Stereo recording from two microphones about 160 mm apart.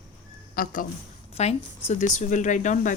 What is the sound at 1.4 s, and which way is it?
A woman's voice, 40° left (ahead or behind).